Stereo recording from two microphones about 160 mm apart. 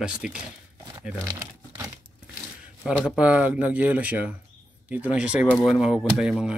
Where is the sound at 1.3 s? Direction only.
20° right (ahead or behind).